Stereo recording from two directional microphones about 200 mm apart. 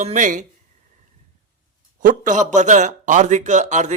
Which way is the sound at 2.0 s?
40° right (ahead or behind).